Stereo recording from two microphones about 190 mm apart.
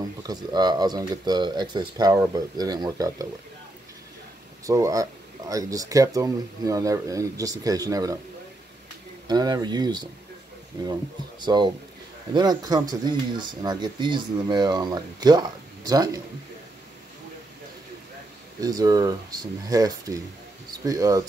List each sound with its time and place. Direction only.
0.2 s speech: 20° right (ahead or behind)
4.6 s speech: 20° right (ahead or behind)
9.3 s speech: 20° right (ahead or behind)
11.4 s speech: 25° right (ahead or behind)
18.6 s speech: 20° right (ahead or behind)